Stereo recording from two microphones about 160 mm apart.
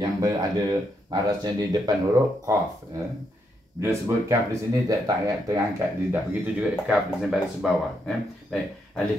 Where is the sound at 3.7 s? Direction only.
15° right (ahead or behind).